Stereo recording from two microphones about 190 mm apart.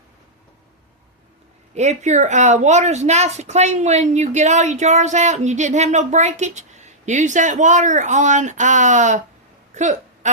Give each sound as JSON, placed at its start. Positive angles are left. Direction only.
{"t": 1.7, "sound": "a woman's voice", "side_deg": -35}